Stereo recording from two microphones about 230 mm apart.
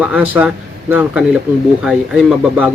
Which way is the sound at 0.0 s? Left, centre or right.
Centre.